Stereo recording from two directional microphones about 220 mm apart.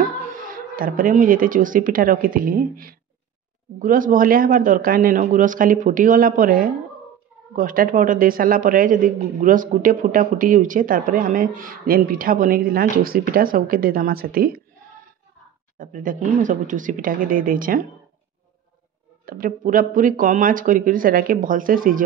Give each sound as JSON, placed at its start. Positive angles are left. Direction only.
{"t": 0.3, "sound": "speech", "side_deg": -40}
{"t": 15.8, "sound": "speech", "side_deg": -35}
{"t": 19.2, "sound": "speech", "side_deg": -40}